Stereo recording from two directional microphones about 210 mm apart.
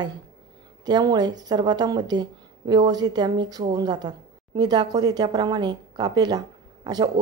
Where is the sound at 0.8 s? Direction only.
20° right (ahead or behind).